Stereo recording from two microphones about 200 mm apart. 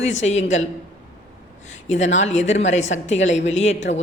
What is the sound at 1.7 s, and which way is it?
Speech, 35° left (ahead or behind).